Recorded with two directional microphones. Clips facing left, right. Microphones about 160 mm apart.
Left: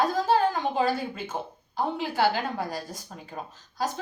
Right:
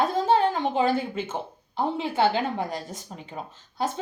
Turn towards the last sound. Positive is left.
turn(degrees=-25)  # may be behind; listen again after turning